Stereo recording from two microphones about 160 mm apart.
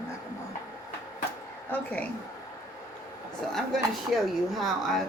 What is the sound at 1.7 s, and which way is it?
Speech, 10° left (ahead or behind).